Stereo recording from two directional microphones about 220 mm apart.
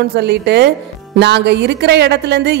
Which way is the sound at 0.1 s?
50° right (ahead or behind).